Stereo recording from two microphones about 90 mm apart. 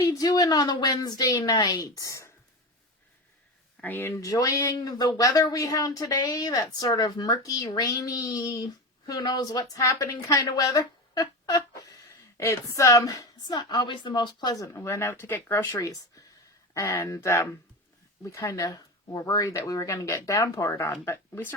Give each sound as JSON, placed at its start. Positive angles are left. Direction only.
{"t": 0.0, "sound": "a sound", "side_deg": 35}
{"t": 0.3, "sound": "speech", "side_deg": 45}
{"t": 3.8, "sound": "speech", "side_deg": 20}
{"t": 4.1, "sound": "a woman's voice", "side_deg": 40}
{"t": 12.0, "sound": "a woman's voice", "side_deg": 30}
{"t": 14.5, "sound": "speech", "side_deg": 35}